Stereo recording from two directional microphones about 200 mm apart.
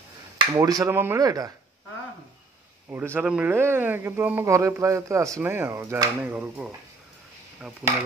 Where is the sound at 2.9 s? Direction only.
10° right (ahead or behind).